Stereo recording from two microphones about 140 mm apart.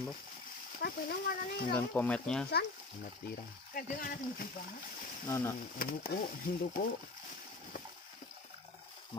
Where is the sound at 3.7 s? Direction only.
85° left.